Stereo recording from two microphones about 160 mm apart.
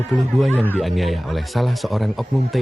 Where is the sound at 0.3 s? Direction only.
Centre (ahead or behind).